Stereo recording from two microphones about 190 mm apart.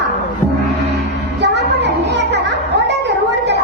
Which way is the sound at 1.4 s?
65° right (ahead or behind).